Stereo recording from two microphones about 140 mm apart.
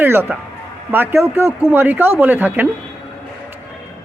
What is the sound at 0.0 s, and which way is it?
A woman's voice, 15° right (ahead or behind).